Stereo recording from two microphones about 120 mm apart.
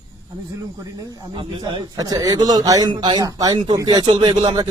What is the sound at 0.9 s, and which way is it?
A man's voice, 35° right (ahead or behind).